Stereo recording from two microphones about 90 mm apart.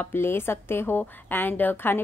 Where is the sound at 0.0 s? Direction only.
25° left (ahead or behind).